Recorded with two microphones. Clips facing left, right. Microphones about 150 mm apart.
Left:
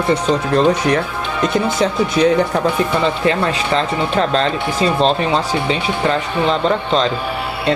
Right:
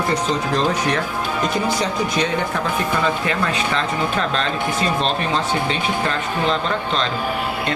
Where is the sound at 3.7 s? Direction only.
35° left (ahead or behind).